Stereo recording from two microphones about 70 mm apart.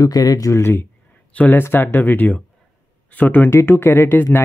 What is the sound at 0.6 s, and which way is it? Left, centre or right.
Speech, left.